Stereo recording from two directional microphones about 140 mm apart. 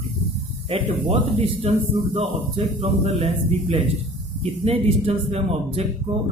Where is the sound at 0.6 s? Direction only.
40° right (ahead or behind).